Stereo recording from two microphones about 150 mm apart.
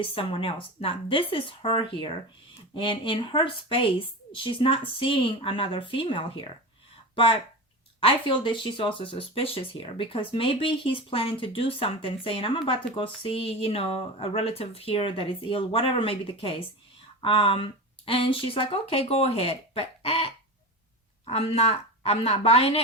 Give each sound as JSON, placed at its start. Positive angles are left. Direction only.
{"t": 0.0, "sound": "speech", "side_deg": 35}
{"t": 8.0, "sound": "a woman's voice", "side_deg": 35}